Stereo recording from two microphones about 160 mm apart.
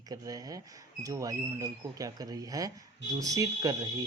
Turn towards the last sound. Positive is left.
turn(degrees=-25)  # may be behind; listen again after turning